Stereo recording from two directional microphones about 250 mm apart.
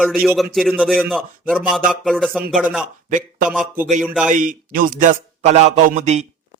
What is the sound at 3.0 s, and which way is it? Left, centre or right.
Speech, right.